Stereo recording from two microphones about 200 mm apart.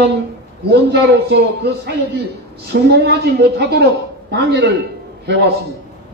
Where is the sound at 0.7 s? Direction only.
55° right (ahead or behind).